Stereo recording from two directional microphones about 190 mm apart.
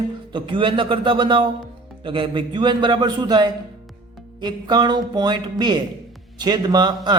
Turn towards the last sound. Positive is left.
turn(degrees=-20)  # may be behind; listen again after turning